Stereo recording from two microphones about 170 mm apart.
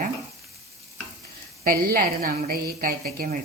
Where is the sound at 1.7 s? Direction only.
60° right (ahead or behind).